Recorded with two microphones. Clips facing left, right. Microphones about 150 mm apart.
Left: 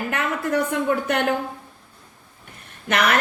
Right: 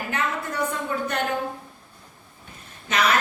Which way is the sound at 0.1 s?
60° left (ahead or behind).